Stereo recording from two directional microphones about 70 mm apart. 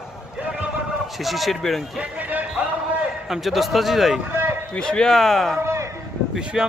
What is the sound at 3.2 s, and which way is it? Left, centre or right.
Speech, centre.